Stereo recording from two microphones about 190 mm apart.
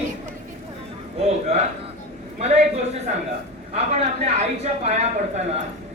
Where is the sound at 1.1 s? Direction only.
35° right (ahead or behind).